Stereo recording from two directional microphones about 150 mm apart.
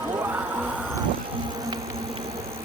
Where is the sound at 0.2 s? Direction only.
10° right (ahead or behind).